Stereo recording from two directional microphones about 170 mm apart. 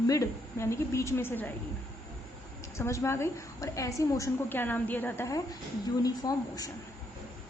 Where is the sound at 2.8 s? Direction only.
15° left (ahead or behind).